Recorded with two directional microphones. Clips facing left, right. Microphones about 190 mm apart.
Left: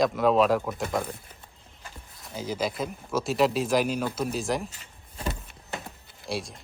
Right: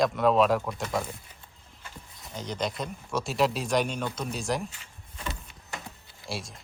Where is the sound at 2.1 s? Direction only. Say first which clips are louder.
Left 4 dB; 5° left (ahead or behind).